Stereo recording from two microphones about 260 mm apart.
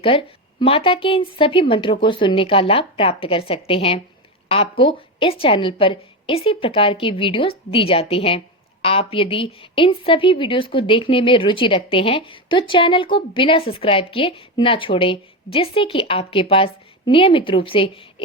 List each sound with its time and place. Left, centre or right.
0.0 s a woman's voice: left